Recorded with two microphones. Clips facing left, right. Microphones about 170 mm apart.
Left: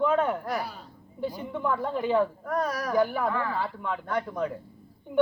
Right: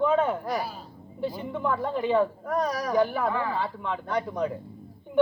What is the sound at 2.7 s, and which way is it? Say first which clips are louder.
Speech: right 1 dB; 15° right (ahead or behind).